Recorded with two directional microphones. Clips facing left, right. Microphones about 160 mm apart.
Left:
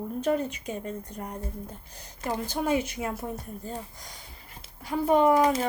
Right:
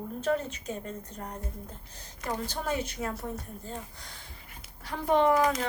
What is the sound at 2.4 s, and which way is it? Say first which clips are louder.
Speech: left 5 dB; 10° left (ahead or behind).